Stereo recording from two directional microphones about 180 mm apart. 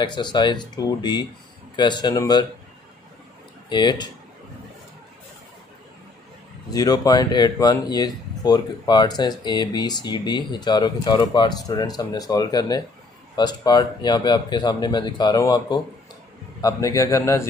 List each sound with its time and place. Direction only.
0.0 s speech: 25° left (ahead or behind)
3.6 s speech: 25° left (ahead or behind)
6.7 s a man's voice: 20° left (ahead or behind)